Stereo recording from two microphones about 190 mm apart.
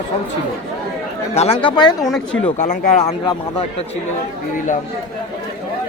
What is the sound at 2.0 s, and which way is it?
Speech, 5° left (ahead or behind).